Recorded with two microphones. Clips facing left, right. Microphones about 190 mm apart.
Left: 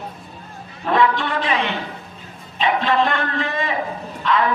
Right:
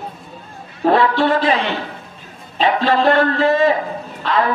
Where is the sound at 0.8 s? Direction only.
35° right (ahead or behind).